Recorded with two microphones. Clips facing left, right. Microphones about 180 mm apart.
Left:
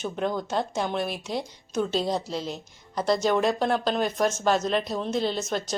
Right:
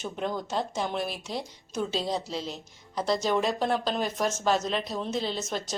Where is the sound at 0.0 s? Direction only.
Centre (ahead or behind).